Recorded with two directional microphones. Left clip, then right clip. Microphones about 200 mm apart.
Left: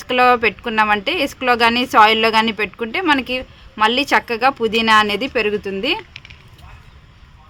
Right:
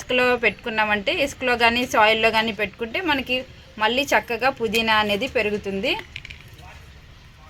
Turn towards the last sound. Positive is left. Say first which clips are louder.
# left 4 dB
turn(degrees=55)  # may be behind; listen again after turning